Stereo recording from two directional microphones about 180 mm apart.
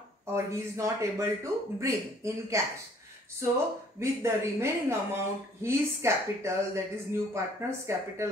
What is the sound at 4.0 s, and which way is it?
Speech, 15° right (ahead or behind).